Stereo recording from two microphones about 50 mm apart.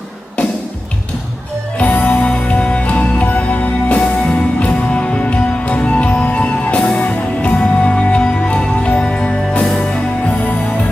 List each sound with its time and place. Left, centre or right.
1.8 s music: left